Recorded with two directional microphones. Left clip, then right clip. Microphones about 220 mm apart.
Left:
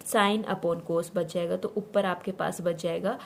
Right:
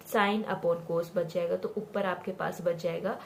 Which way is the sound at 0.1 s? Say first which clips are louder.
Left 3 dB; 50° left (ahead or behind).